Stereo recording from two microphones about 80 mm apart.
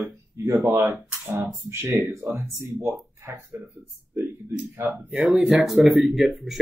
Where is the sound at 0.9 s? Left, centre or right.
Centre.